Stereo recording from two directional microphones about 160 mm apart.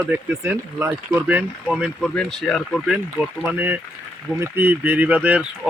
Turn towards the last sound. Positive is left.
turn(degrees=-10)  # may be behind; listen again after turning